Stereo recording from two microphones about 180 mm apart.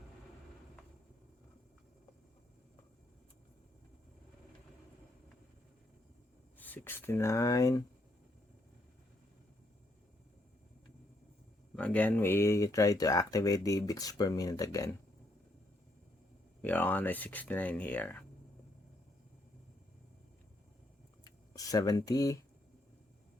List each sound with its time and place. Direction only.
6.6 s speech: 10° left (ahead or behind)
11.8 s speech: 10° left (ahead or behind)
16.6 s speech: 10° left (ahead or behind)
21.2 s a sound: 20° left (ahead or behind)